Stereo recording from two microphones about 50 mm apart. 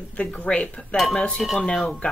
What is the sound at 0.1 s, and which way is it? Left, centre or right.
Speech, left.